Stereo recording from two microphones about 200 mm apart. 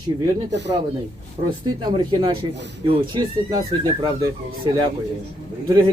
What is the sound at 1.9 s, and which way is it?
A man's voice, 25° right (ahead or behind).